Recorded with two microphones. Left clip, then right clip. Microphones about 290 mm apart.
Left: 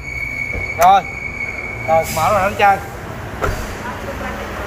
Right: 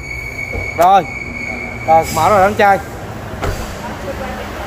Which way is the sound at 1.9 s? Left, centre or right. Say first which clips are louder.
Right 4 dB; right.